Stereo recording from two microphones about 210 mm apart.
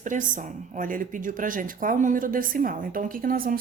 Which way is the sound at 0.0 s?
35° right (ahead or behind).